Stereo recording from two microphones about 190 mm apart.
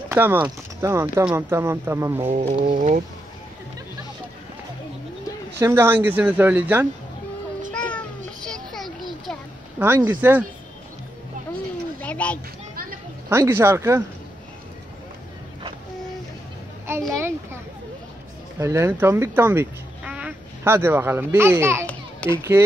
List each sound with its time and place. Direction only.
0.1 s speech: 10° right (ahead or behind)
2.2 s insect: 40° right (ahead or behind)
5.6 s speech: 15° right (ahead or behind)
7.7 s music: 5° left (ahead or behind)
8.5 s a sound: centre (ahead or behind)
9.8 s speech: 10° right (ahead or behind)
12.0 s children playing: 5° left (ahead or behind)
13.3 s speech: 15° right (ahead or behind)
16.9 s a sound: 15° right (ahead or behind)
18.6 s speech: 15° right (ahead or behind)